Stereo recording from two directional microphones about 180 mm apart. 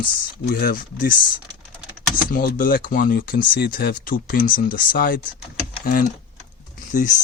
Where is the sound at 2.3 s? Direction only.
55° left (ahead or behind).